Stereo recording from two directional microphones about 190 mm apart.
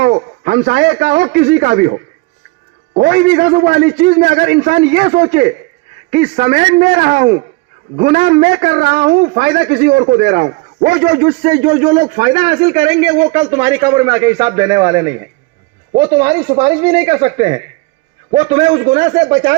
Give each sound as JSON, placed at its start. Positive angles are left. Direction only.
{"t": 0.0, "sound": "a man's voice", "side_deg": -50}
{"t": 3.0, "sound": "a man's voice", "side_deg": -50}
{"t": 11.8, "sound": "a man's voice", "side_deg": -35}
{"t": 13.3, "sound": "a man's voice", "side_deg": -20}